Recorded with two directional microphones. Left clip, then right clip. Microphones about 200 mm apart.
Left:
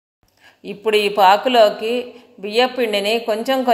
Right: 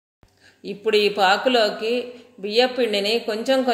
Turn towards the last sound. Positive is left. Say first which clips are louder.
# left 3 dB
turn(degrees=25)  # may be behind; listen again after turning